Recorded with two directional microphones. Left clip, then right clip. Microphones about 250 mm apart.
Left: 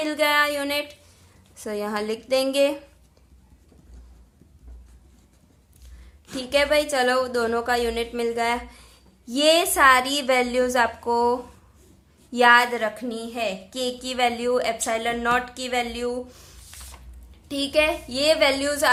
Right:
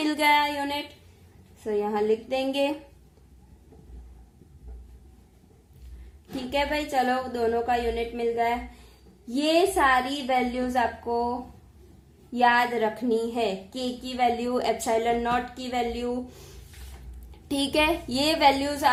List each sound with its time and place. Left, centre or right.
0.0 s a woman's voice: centre
6.3 s a woman's voice: centre
12.3 s a woman's voice: centre
17.3 s a woman's voice: centre